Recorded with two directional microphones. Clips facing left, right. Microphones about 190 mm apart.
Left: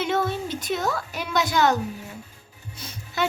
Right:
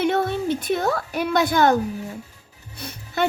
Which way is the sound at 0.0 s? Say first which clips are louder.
Right 4 dB; 60° right (ahead or behind).